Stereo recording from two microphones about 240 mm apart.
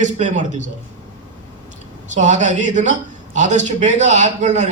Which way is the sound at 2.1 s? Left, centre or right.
Right.